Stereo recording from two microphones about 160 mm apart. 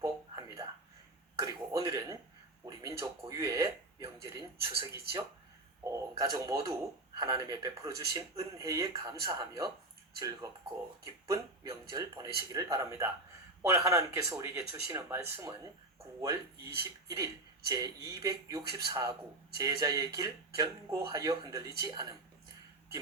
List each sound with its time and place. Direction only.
0.0 s a sound: 20° right (ahead or behind)
5.8 s speech: 20° right (ahead or behind)
17.1 s speech: 20° right (ahead or behind)